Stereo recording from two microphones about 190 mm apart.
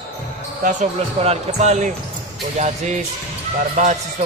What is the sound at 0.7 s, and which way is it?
Speech, 35° right (ahead or behind).